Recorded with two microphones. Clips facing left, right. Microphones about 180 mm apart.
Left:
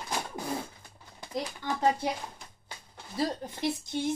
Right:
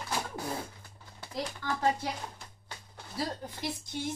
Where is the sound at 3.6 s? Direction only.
25° left (ahead or behind).